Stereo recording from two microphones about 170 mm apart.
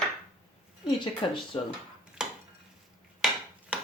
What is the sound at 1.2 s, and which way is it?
Speech, 30° left (ahead or behind).